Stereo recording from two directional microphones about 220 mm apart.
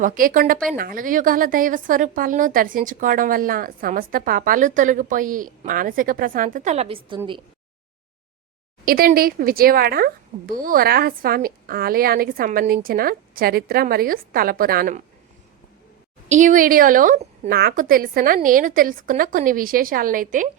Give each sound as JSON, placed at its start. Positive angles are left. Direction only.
{"t": 0.0, "sound": "a woman's voice", "side_deg": -40}
{"t": 8.8, "sound": "speech", "side_deg": -40}
{"t": 16.3, "sound": "a woman's voice", "side_deg": -35}